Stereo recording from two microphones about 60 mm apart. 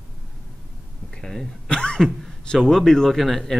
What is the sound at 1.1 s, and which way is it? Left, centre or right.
A man's voice, centre.